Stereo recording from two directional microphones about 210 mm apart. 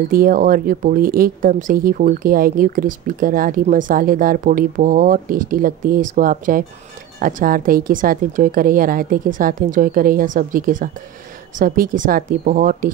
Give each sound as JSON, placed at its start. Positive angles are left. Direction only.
{"t": 0.1, "sound": "speech", "side_deg": -45}